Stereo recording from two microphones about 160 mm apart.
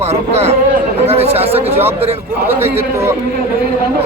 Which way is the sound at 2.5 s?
15° right (ahead or behind).